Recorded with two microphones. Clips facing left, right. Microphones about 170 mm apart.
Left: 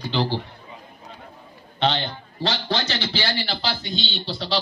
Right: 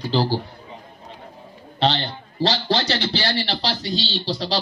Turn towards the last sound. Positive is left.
turn(degrees=-40)  # may be behind; listen again after turning